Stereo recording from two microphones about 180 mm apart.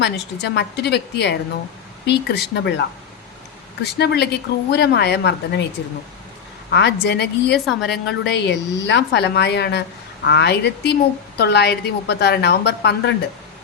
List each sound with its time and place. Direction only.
0.0 s a woman's voice: 70° left (ahead or behind)
3.9 s a woman's voice: 65° left (ahead or behind)
6.7 s a woman's voice: 70° left (ahead or behind)
7.7 s a woman's voice: centre (ahead or behind)
8.0 s a woman's voice: 75° left (ahead or behind)